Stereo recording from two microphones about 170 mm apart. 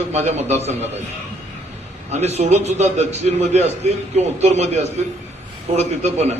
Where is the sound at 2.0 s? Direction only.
40° right (ahead or behind).